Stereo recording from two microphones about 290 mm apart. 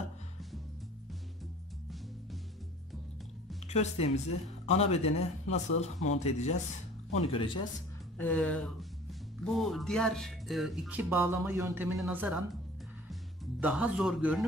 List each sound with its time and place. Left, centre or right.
3.6 s a man's voice: left
8.2 s speech: centre
13.1 s music: centre